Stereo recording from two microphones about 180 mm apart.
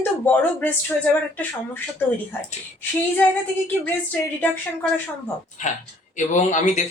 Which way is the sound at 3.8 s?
10° left (ahead or behind).